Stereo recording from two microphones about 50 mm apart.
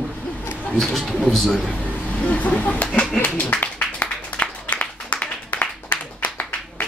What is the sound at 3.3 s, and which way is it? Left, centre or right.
Speech, left.